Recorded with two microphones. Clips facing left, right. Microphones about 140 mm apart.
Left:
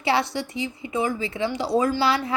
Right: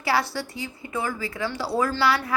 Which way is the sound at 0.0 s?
20° left (ahead or behind).